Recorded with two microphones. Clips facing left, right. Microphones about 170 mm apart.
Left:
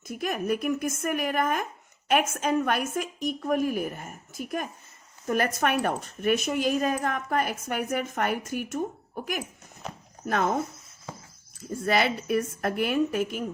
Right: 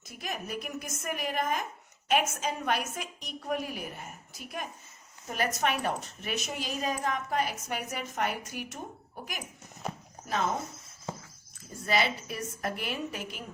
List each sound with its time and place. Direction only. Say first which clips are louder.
0.1 s a woman's voice: left 9 dB; 55° left (ahead or behind)
10.2 s a woman's voice: left 5 dB; 55° left (ahead or behind)
11.9 s a woman's voice: left 5 dB; 55° left (ahead or behind)